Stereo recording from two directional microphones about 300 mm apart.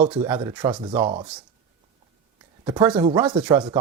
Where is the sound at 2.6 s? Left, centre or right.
Centre.